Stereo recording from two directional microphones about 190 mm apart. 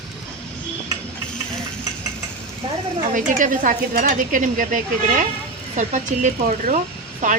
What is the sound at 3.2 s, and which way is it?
Speech, 45° right (ahead or behind).